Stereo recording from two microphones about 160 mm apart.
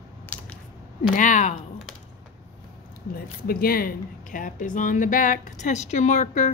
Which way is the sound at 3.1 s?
70° left (ahead or behind).